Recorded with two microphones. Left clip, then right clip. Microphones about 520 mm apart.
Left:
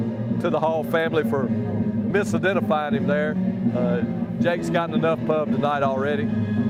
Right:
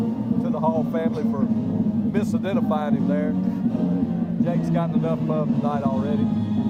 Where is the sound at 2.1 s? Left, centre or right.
Left.